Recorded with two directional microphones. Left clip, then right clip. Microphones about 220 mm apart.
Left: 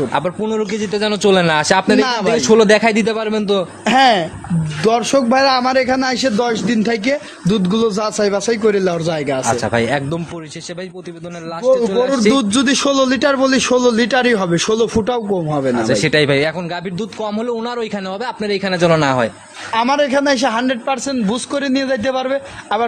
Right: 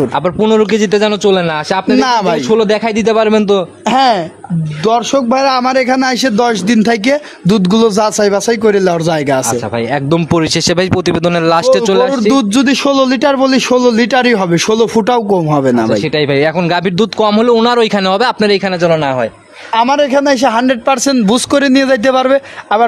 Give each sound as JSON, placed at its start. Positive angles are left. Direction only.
{"t": 0.4, "sound": "a man's voice", "side_deg": -45}
{"t": 1.2, "sound": "a man's voice", "side_deg": -5}
{"t": 2.0, "sound": "a man's voice", "side_deg": -40}
{"t": 2.5, "sound": "a man's voice", "side_deg": 0}
{"t": 3.1, "sound": "a man's voice", "side_deg": -40}
{"t": 3.5, "sound": "a man's voice", "side_deg": -25}
{"t": 12.3, "sound": "a man's voice", "side_deg": -30}
{"t": 17.0, "sound": "a man's voice", "side_deg": -45}
{"t": 19.7, "sound": "a man's voice", "side_deg": -35}